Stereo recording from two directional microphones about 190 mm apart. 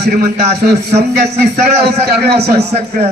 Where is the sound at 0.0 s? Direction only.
60° right (ahead or behind).